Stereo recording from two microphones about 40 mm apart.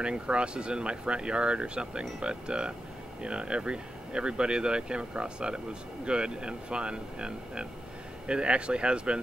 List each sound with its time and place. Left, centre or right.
0.0 s speech: right